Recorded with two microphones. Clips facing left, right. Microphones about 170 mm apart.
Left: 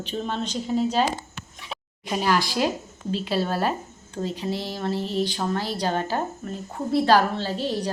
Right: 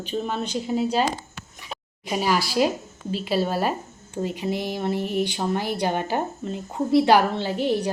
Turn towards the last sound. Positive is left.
turn(degrees=-15)  # may be behind; listen again after turning